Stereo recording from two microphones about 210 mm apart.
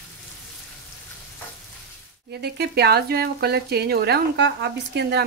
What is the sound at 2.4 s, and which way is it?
Speech, 50° right (ahead or behind).